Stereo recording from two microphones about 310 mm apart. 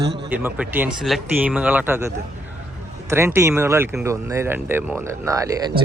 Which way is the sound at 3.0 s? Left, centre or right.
Centre.